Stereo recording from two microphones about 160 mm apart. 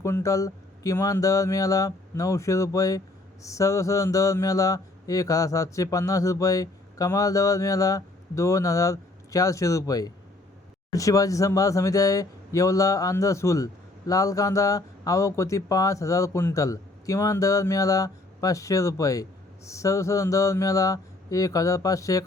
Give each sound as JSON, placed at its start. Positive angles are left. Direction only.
{"t": 0.0, "sound": "speech", "side_deg": 20}